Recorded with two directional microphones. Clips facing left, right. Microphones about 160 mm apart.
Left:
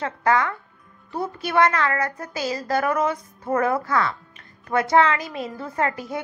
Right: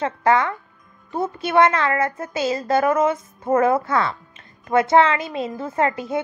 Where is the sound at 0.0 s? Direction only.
25° right (ahead or behind).